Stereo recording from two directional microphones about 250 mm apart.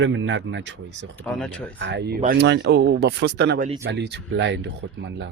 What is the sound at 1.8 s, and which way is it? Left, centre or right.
Speech, right.